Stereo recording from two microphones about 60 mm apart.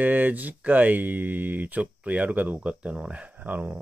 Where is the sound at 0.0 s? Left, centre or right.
Right.